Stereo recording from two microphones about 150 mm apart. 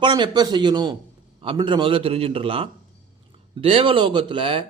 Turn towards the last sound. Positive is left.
turn(degrees=-35)  # may be behind; listen again after turning